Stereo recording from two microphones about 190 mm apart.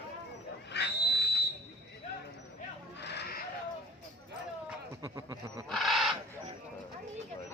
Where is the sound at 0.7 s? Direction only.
60° left (ahead or behind).